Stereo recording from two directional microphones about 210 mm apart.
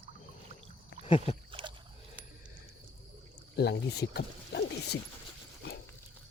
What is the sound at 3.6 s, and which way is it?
Speech, 50° left (ahead or behind).